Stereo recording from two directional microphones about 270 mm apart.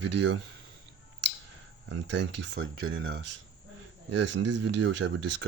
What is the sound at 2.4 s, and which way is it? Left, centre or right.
Speech, right.